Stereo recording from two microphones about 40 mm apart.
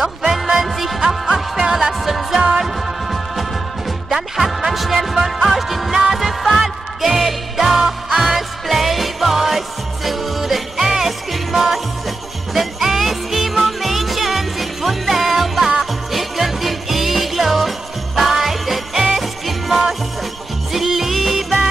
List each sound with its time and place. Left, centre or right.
0.3 s music: centre